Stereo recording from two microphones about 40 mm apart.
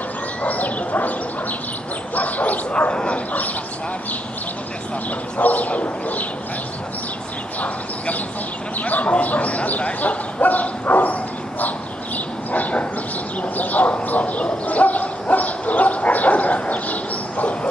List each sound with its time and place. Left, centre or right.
0.4 s a sound: left
2.1 s bow-wow: left
2.9 s dog: left
5.4 s bow-wow: left
8.8 s speech: left
13.6 s speech: left
14.0 s bow-wow: left